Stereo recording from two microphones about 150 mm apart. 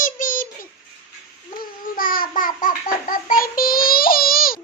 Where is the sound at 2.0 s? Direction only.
70° left (ahead or behind).